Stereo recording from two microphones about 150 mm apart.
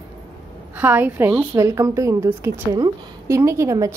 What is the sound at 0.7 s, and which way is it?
A woman's voice, 10° right (ahead or behind).